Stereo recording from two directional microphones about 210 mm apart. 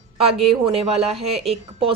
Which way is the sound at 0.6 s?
30° right (ahead or behind).